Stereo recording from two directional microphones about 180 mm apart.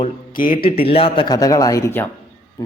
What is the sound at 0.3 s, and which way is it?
Speech, 50° left (ahead or behind).